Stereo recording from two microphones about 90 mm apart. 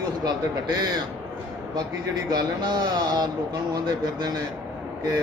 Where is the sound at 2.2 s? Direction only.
50° right (ahead or behind).